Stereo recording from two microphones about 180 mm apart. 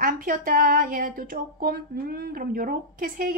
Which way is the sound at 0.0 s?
50° right (ahead or behind).